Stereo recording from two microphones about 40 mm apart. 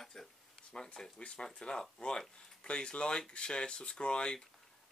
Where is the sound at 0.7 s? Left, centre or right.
Left.